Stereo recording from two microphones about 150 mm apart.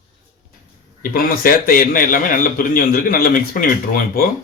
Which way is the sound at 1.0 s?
75° left (ahead or behind).